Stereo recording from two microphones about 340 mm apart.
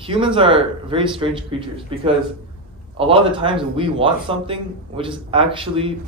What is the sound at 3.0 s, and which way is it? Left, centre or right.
Speech, centre.